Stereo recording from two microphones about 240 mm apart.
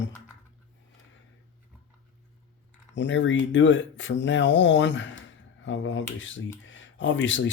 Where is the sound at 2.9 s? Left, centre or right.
Left.